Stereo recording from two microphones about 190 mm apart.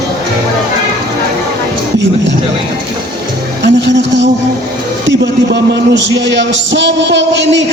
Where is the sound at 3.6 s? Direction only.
65° right (ahead or behind).